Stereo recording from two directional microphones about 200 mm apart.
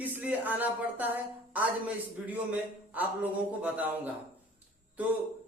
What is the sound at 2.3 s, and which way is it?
Speech, 10° right (ahead or behind).